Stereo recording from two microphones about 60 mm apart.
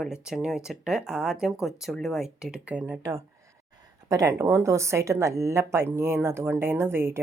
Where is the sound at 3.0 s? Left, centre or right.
Right.